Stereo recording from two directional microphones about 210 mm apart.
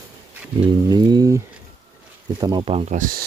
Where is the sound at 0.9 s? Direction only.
20° right (ahead or behind).